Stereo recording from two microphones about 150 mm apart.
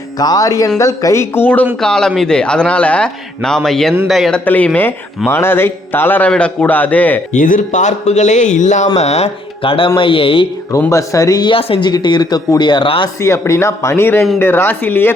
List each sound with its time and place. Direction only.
0.2 s a man's voice: 25° left (ahead or behind); by 4.4 s centre (ahead or behind)
4.4 s a man's voice: 10° left (ahead or behind)
7.3 s speech: 60° left (ahead or behind); by 10.4 s 35° left (ahead or behind)
10.7 s speech: 20° left (ahead or behind)
13.1 s a man's voice: 20° left (ahead or behind)